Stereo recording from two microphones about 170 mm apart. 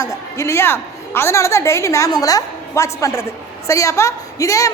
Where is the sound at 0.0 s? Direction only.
15° left (ahead or behind).